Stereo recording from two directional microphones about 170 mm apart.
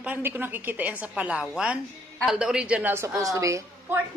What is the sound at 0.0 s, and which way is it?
A woman's voice, 10° right (ahead or behind).